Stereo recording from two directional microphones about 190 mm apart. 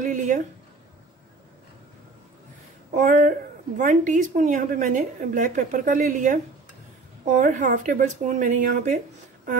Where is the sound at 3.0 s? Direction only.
40° right (ahead or behind).